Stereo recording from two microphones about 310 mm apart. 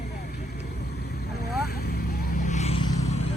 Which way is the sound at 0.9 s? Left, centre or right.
Left.